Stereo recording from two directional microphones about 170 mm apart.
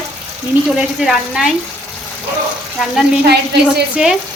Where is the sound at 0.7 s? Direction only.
5° right (ahead or behind).